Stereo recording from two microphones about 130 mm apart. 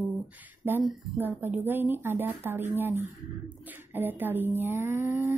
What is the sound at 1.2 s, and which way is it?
Speech, 15° right (ahead or behind).